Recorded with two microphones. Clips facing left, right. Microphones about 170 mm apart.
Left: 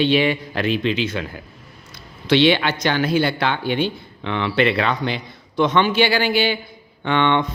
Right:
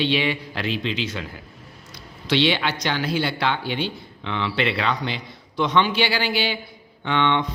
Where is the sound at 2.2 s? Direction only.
55° left (ahead or behind).